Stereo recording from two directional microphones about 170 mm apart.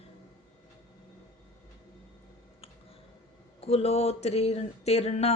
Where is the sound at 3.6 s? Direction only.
35° left (ahead or behind).